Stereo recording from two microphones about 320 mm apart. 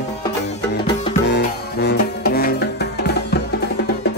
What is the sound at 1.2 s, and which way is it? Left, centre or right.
Music, left.